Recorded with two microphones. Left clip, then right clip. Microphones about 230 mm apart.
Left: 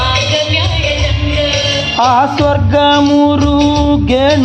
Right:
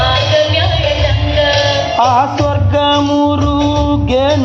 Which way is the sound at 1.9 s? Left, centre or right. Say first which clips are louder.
Left 2 dB; left.